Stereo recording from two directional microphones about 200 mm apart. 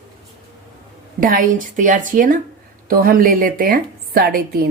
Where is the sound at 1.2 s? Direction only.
45° right (ahead or behind).